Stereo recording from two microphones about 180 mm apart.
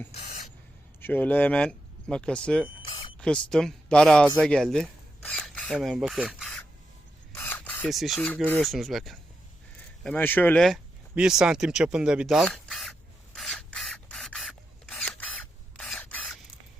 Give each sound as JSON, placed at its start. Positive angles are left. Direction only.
{"t": 0.1, "sound": "spray", "side_deg": 40}
{"t": 1.0, "sound": "speech", "side_deg": 10}
{"t": 2.8, "sound": "a sound", "side_deg": 30}
{"t": 3.2, "sound": "speech", "side_deg": 5}
{"t": 7.3, "sound": "filing", "side_deg": 10}
{"t": 8.4, "sound": "speech", "side_deg": 5}
{"t": 11.1, "sound": "a sound", "side_deg": -5}
{"t": 15.8, "sound": "mechanisms", "side_deg": 5}